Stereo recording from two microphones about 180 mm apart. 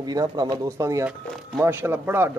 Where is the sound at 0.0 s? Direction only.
20° right (ahead or behind).